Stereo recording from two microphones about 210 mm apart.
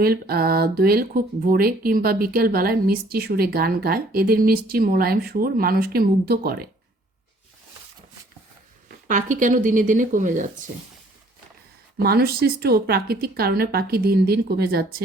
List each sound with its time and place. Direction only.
0.0 s speech: 45° right (ahead or behind)
9.0 s speech: 40° right (ahead or behind)
11.9 s speech: 45° right (ahead or behind)